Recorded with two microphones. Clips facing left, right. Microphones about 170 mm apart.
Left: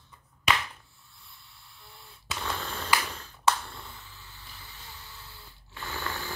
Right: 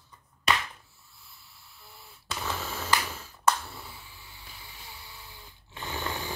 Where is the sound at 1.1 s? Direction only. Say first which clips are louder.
Left 1 dB; 5° right (ahead or behind).